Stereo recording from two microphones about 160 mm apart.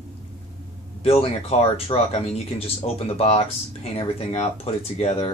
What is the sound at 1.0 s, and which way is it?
Speech, 40° left (ahead or behind).